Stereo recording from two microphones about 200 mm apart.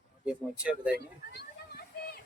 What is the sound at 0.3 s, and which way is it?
Speech, 5° right (ahead or behind).